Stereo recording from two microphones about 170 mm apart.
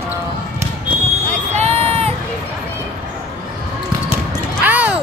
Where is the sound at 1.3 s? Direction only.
40° right (ahead or behind).